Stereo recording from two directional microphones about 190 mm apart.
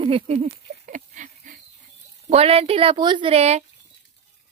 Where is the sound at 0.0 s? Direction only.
30° right (ahead or behind).